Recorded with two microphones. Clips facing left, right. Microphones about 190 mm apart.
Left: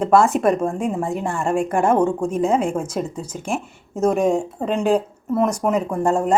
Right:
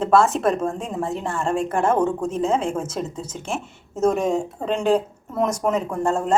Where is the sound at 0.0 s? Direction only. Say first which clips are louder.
Left 2 dB; 15° left (ahead or behind).